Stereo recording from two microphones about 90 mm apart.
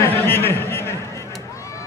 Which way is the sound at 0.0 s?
25° left (ahead or behind).